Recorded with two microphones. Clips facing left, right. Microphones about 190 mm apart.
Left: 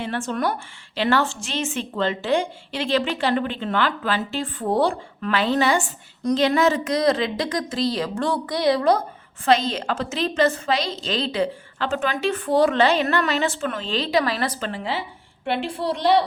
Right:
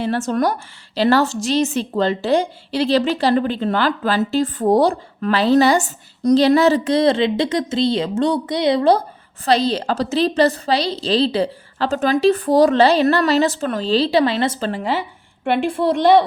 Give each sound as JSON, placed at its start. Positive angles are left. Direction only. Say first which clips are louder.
{"t": 0.0, "sound": "a woman's voice", "louder": "right 6 dB", "side_deg": -40}
{"t": 14.7, "sound": "a woman's voice", "louder": "right 6 dB", "side_deg": -45}